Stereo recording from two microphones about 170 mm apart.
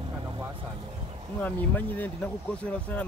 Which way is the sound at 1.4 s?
10° left (ahead or behind).